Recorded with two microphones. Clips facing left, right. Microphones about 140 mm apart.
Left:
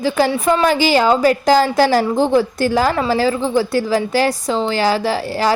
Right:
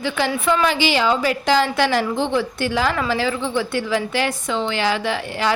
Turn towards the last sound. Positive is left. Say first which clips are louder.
# left 4 dB
turn(degrees=35)  # may be behind; listen again after turning